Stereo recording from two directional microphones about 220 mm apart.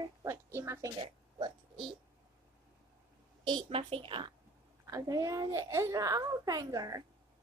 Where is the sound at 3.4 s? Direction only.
20° right (ahead or behind).